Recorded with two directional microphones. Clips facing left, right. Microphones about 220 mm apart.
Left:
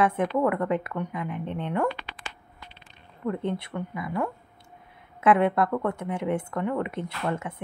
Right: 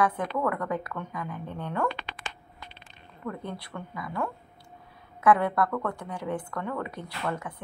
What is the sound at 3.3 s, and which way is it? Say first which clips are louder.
Speech: left 7 dB; 25° left (ahead or behind).